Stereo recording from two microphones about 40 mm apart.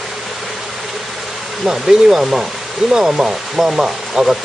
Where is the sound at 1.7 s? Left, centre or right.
Centre.